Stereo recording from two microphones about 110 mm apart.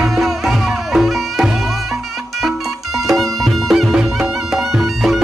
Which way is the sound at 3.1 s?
Centre (ahead or behind).